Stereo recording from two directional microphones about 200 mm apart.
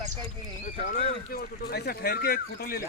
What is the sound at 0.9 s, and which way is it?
Speech, 40° left (ahead or behind).